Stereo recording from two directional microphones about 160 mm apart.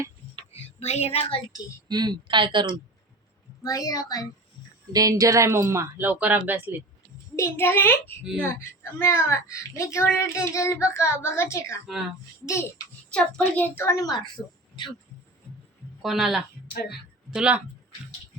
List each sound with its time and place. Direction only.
0.6 s speech: 40° left (ahead or behind)
1.9 s speech: 25° right (ahead or behind)
3.7 s a woman's voice: 20° left (ahead or behind)
4.9 s speech: 25° right (ahead or behind)
7.3 s a child's voice: 15° left (ahead or behind)
11.9 s a woman's voice: centre (ahead or behind); by 14.9 s 25° left (ahead or behind)
16.0 s a woman's voice: centre (ahead or behind)